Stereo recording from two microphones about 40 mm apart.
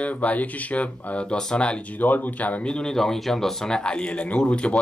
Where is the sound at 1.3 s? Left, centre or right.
Left.